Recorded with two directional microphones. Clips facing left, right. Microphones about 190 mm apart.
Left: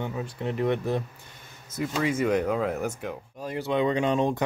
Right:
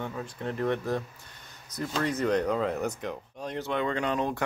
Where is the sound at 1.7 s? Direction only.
5° left (ahead or behind).